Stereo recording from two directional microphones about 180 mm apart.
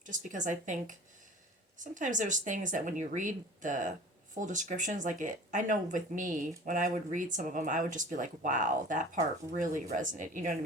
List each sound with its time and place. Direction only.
0.0 s speech: 45° right (ahead or behind)